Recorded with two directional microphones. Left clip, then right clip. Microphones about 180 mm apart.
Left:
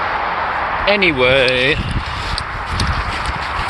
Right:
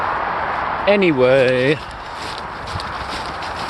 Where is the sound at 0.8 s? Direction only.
45° right (ahead or behind).